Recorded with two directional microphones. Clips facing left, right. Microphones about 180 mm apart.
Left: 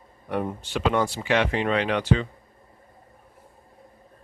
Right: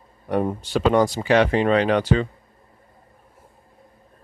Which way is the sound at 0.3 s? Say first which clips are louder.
Right 5 dB; 40° right (ahead or behind).